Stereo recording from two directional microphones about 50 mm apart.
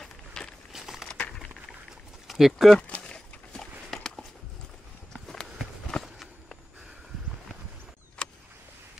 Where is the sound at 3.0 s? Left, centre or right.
Centre.